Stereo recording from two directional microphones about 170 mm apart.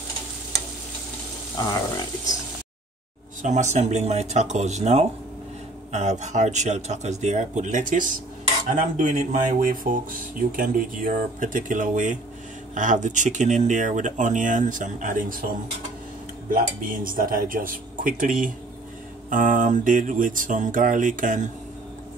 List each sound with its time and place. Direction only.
1.6 s speech: 25° left (ahead or behind)
3.4 s speech: 45° right (ahead or behind)
16.4 s speech: 55° right (ahead or behind)
19.3 s speech: 50° right (ahead or behind)